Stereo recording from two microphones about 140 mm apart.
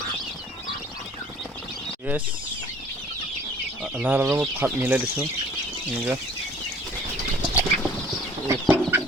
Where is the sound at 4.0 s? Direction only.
15° right (ahead or behind).